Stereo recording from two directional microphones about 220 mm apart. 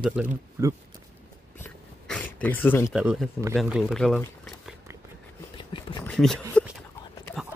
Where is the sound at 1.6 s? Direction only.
5° left (ahead or behind).